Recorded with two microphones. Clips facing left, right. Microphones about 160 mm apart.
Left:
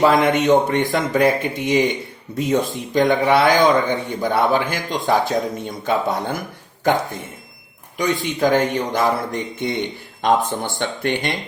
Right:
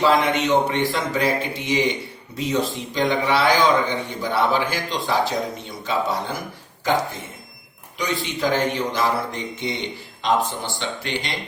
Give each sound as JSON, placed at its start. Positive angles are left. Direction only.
{"t": 0.0, "sound": "speech", "side_deg": 50}
{"t": 7.9, "sound": "speech", "side_deg": 50}